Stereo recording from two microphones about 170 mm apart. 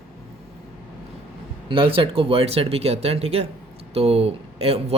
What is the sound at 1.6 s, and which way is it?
Speech, 30° right (ahead or behind).